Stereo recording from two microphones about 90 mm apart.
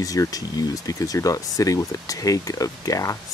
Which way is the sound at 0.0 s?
40° left (ahead or behind).